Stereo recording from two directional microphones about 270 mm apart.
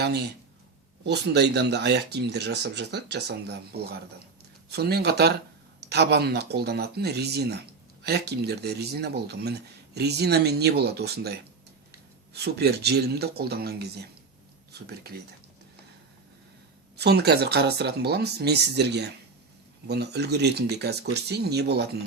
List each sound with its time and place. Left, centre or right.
0.0 s speech: right
17.0 s speech: right